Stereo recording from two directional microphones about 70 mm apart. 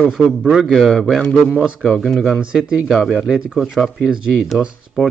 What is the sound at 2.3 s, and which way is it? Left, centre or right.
Speech, centre.